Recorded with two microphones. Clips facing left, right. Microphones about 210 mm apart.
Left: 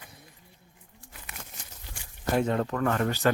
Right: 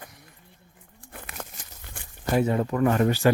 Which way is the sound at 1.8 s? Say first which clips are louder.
Right 4 dB; 55° right (ahead or behind).